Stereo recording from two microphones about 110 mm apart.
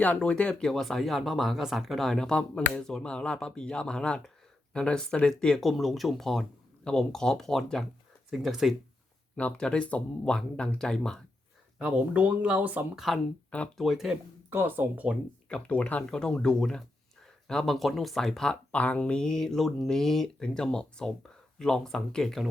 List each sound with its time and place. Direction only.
0.0 s speech: 10° left (ahead or behind)
11.8 s speech: 10° right (ahead or behind)
13.1 s speech: centre (ahead or behind)
14.5 s speech: 20° right (ahead or behind)
15.4 s speech: 10° left (ahead or behind)